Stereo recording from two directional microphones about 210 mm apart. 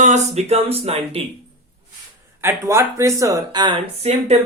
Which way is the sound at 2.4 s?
15° right (ahead or behind).